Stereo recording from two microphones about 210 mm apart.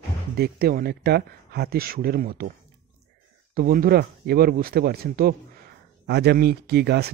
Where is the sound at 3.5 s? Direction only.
45° right (ahead or behind).